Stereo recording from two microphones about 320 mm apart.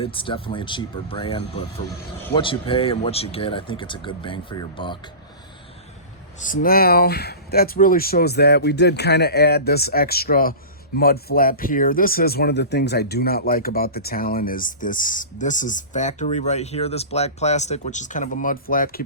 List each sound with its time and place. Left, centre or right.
0.0 s speech: centre
6.4 s speech: left